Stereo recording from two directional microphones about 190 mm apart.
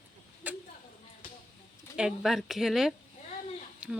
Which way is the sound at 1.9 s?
5° right (ahead or behind).